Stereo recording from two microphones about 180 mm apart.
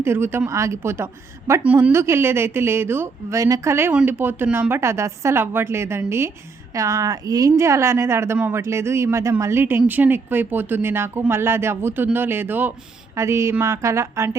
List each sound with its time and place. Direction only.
0.0 s a woman's voice: 15° right (ahead or behind)